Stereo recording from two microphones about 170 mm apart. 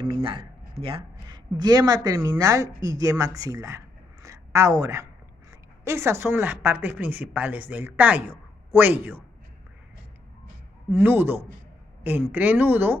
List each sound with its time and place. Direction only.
0.1 s a woman's voice: 30° right (ahead or behind); by 9.2 s 10° right (ahead or behind)
10.9 s a woman's voice: 10° right (ahead or behind)